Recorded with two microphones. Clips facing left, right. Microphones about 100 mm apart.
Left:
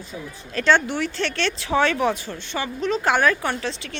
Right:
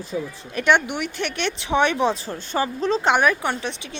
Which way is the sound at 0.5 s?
15° right (ahead or behind).